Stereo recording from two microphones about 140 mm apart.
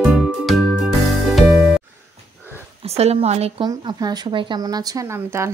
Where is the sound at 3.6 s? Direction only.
30° right (ahead or behind).